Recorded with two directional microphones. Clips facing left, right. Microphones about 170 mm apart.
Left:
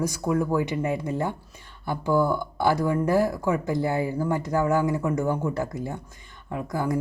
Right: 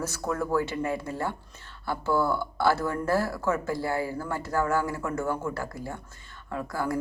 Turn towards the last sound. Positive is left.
turn(degrees=20)  # may be behind; listen again after turning